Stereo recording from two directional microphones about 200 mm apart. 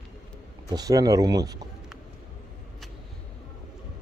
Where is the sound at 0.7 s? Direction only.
20° right (ahead or behind).